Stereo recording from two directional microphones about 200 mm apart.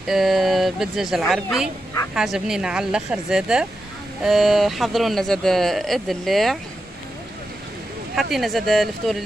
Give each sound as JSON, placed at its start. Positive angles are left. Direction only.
{"t": 0.1, "sound": "speech", "side_deg": 0}
{"t": 8.1, "sound": "speech", "side_deg": 0}